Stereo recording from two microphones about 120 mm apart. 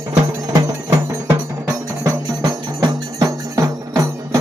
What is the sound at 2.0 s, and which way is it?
Music, 35° right (ahead or behind).